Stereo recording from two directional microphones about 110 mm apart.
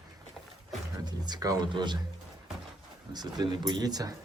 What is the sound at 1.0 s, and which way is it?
Speech, 40° right (ahead or behind).